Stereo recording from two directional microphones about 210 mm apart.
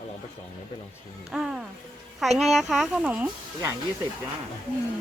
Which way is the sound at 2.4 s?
Centre (ahead or behind).